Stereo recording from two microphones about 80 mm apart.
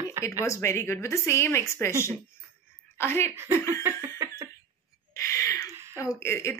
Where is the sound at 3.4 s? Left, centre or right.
Right.